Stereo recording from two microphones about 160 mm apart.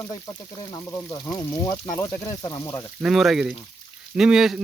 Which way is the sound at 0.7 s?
25° left (ahead or behind).